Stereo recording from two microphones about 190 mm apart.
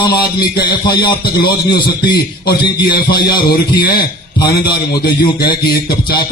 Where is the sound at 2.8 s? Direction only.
55° left (ahead or behind).